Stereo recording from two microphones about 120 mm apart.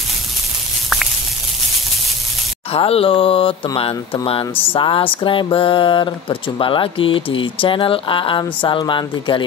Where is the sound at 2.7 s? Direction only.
55° left (ahead or behind).